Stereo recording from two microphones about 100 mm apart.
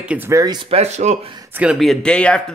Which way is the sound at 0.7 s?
90° right.